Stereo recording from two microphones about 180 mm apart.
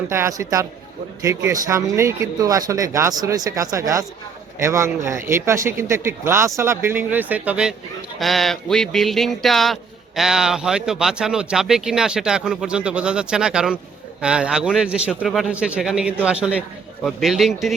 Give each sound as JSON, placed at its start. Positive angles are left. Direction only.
{"t": 0.1, "sound": "speech", "side_deg": -15}